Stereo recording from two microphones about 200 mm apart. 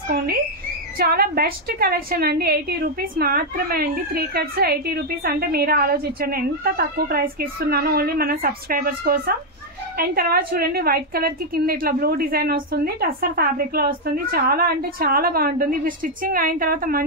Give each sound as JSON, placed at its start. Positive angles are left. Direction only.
{"t": 0.9, "sound": "a woman's voice", "side_deg": -50}